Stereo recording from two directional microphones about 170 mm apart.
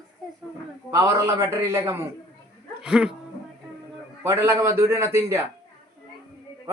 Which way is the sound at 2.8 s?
5° right (ahead or behind).